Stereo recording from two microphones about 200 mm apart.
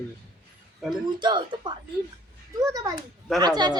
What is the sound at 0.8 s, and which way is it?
Speech, centre (ahead or behind).